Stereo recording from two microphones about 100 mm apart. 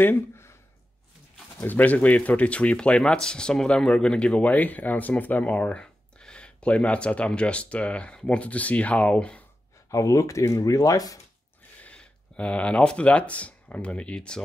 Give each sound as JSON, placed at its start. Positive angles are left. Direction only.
{"t": 0.0, "sound": "speech", "side_deg": 25}
{"t": 1.6, "sound": "speech", "side_deg": 15}
{"t": 9.8, "sound": "speech", "side_deg": 30}
{"t": 11.8, "sound": "speech", "side_deg": 10}